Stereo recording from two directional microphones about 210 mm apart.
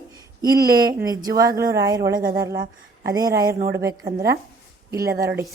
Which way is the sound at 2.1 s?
45° right (ahead or behind).